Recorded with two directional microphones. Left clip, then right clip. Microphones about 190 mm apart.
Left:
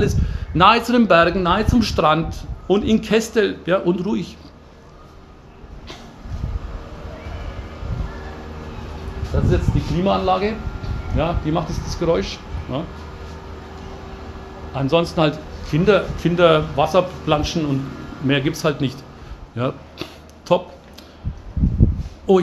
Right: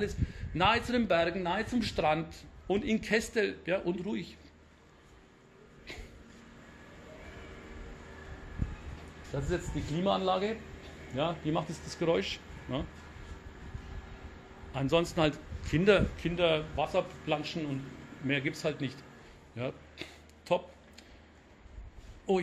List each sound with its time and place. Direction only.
0.0 s a man's voice: 5° right (ahead or behind)
9.3 s speech: 45° right (ahead or behind)
10.0 s a man's voice: 30° right (ahead or behind)
14.7 s a man's voice: 40° right (ahead or behind)
16.2 s a man's voice: centre (ahead or behind)
19.5 s a sound: centre (ahead or behind)
22.3 s a man's voice: 5° right (ahead or behind)